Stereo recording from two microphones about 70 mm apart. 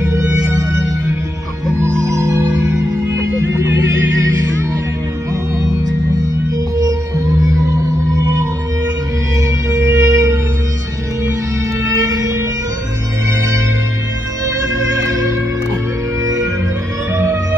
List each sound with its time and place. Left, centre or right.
0.0 s music: right
6.8 s music: right
9.4 s music: right
11.8 s music: right
14.4 s music: right
17.1 s music: right